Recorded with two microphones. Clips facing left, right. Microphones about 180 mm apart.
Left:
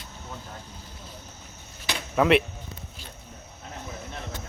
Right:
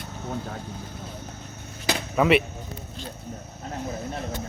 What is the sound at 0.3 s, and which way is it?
Speech, 60° right (ahead or behind).